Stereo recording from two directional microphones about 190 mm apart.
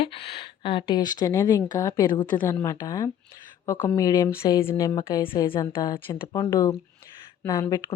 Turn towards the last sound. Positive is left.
turn(degrees=15)  # may be behind; listen again after turning